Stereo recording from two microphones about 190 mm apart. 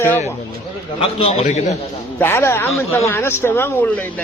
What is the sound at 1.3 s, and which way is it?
Speech, 35° left (ahead or behind).